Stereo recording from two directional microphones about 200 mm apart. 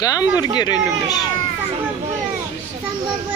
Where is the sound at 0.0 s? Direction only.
15° left (ahead or behind).